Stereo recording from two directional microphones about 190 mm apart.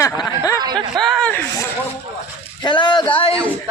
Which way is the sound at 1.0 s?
Centre (ahead or behind).